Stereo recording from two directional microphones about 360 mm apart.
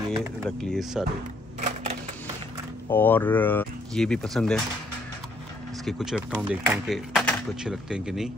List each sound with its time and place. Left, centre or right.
0.1 s speech: centre
1.6 s typewriter: centre
2.9 s speech: centre
5.9 s speech: centre